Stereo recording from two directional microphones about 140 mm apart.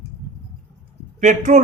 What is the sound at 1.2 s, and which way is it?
Speech, 65° right (ahead or behind).